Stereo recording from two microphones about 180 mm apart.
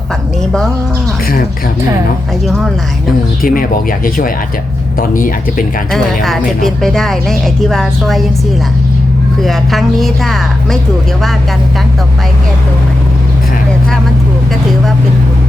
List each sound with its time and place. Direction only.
2.5 s speech: centre (ahead or behind)
3.4 s speech: 50° left (ahead or behind)
5.9 s speech: centre (ahead or behind)
9.4 s speech: centre (ahead or behind)